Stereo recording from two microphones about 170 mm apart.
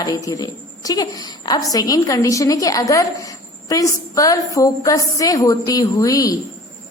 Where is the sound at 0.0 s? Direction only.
20° left (ahead or behind).